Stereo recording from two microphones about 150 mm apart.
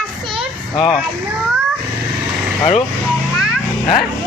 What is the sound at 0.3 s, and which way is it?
Children playing, centre (ahead or behind).